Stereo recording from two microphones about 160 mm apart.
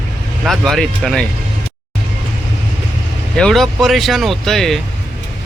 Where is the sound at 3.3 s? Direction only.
5° left (ahead or behind).